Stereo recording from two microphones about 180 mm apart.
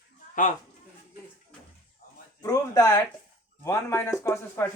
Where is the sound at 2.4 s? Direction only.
20° left (ahead or behind).